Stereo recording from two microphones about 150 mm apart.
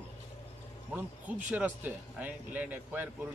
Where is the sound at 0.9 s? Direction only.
10° right (ahead or behind).